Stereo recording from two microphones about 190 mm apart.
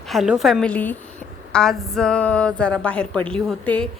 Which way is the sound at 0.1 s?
Centre (ahead or behind).